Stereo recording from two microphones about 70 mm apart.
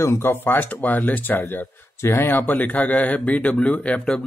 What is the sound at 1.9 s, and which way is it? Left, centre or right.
Speech, left.